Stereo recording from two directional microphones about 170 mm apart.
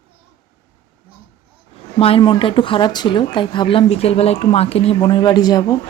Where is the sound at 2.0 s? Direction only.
35° left (ahead or behind).